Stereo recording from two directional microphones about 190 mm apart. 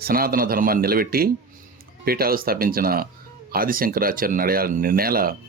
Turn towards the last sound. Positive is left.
turn(degrees=-50)  # may be behind; listen again after turning